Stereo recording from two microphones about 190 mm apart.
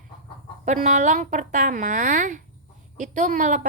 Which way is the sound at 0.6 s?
40° right (ahead or behind).